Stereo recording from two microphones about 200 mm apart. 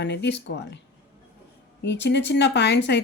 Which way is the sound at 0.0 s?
60° left (ahead or behind).